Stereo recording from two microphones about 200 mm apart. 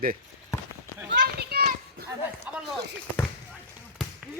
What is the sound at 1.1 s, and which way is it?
Clip-clop, 55° right (ahead or behind).